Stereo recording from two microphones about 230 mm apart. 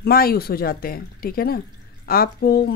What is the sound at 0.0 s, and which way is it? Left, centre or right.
Speech, left.